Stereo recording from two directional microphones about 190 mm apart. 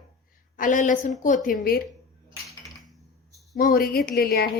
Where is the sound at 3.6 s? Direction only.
50° left (ahead or behind).